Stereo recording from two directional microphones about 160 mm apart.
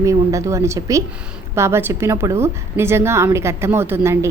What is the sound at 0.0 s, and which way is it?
A woman's voice, 20° right (ahead or behind).